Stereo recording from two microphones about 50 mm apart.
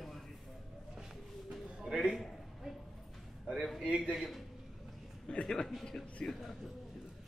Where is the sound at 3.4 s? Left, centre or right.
Centre.